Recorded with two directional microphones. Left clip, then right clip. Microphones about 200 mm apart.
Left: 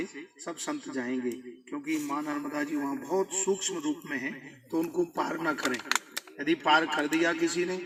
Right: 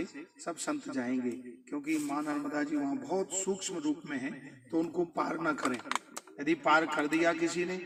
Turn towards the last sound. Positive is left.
turn(degrees=-35)  # may be behind; listen again after turning